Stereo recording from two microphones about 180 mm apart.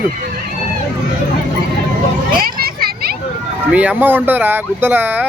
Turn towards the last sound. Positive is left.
turn(degrees=-10)  # may be behind; listen again after turning